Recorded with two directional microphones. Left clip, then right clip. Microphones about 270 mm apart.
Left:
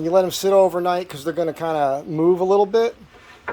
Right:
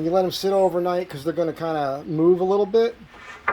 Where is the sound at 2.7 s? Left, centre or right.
Left.